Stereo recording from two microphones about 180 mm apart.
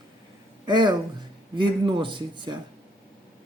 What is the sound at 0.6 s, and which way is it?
Speech, 25° right (ahead or behind).